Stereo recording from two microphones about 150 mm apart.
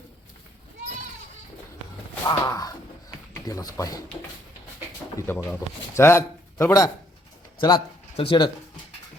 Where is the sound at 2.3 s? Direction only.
25° left (ahead or behind).